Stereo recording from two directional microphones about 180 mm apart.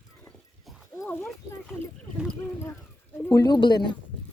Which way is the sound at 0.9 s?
10° left (ahead or behind).